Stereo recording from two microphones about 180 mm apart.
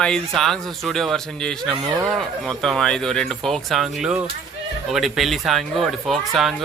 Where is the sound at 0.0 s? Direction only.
Centre (ahead or behind).